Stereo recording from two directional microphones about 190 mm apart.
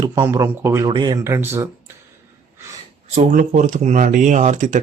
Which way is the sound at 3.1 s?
40° right (ahead or behind).